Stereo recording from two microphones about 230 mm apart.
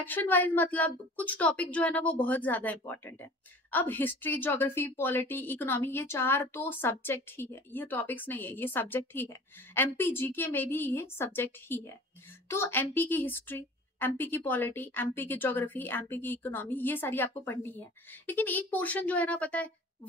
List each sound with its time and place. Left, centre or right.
0.0 s a woman's voice: centre